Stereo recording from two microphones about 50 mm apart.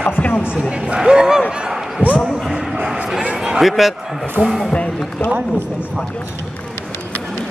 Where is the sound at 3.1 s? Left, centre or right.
Centre.